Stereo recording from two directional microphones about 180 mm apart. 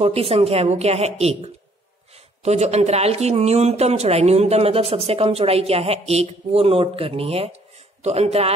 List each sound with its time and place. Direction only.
0.0 s speech: 35° right (ahead or behind)